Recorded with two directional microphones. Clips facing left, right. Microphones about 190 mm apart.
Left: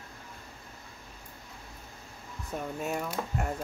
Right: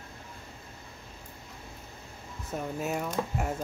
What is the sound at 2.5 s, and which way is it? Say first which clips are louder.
Speech: right 1 dB; 5° right (ahead or behind).